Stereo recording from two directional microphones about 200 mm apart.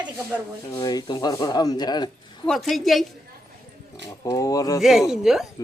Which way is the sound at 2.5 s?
Centre (ahead or behind).